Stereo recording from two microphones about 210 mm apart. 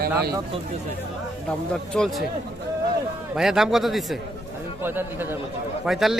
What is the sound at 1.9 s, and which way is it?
Speech, centre (ahead or behind).